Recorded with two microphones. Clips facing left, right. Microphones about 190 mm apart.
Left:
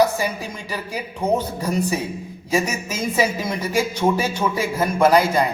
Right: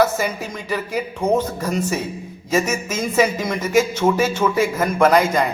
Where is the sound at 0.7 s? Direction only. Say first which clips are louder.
Right 7 dB; 10° left (ahead or behind).